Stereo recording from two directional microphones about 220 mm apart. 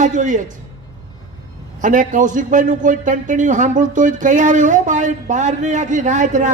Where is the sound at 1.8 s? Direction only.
35° right (ahead or behind).